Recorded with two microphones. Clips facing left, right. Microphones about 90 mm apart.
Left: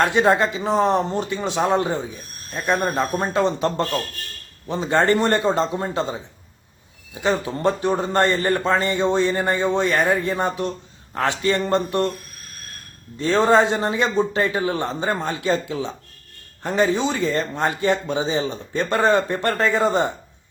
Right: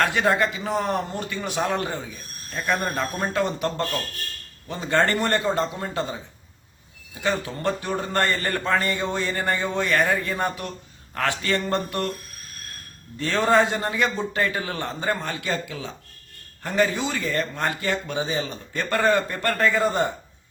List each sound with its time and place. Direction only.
0.0 s a man's voice: 20° left (ahead or behind)
13.1 s a man's voice: 20° left (ahead or behind)